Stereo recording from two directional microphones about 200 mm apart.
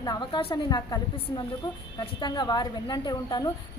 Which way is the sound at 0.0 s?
20° left (ahead or behind).